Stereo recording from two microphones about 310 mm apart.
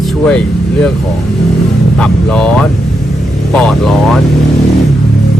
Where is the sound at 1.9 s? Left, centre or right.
Centre.